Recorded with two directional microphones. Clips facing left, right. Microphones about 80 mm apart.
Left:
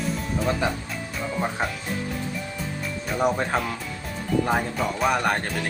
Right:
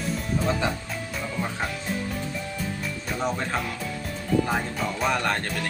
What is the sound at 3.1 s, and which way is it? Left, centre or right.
Speech, centre.